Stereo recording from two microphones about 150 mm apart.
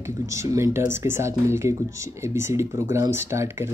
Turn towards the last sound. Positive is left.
turn(degrees=-15)  # may be behind; listen again after turning